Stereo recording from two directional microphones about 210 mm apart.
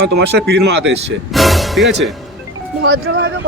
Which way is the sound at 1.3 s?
Centre (ahead or behind).